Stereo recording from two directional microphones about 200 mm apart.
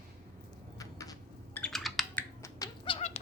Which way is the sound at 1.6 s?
Centre (ahead or behind).